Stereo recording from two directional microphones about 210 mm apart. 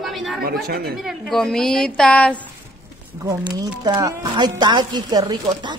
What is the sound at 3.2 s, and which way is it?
Speech, 15° right (ahead or behind).